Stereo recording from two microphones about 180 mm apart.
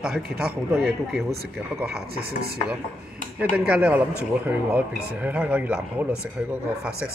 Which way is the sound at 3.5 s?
5° right (ahead or behind).